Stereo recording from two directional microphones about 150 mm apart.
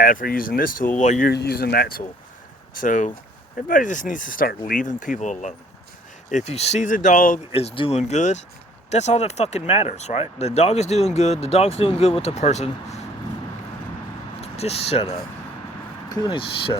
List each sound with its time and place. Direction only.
0.0 s speech: 65° left (ahead or behind)
0.9 s speech: 55° left (ahead or behind)
1.3 s speech: 90° left
2.7 s speech: 60° left (ahead or behind)
7.5 s speech: 40° left (ahead or behind)
14.4 s speech: 40° left (ahead or behind)
16.0 s speech: 30° left (ahead or behind)